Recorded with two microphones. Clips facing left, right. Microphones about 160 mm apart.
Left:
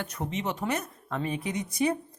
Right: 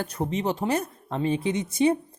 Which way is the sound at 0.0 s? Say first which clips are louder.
Right 5 dB; 35° right (ahead or behind).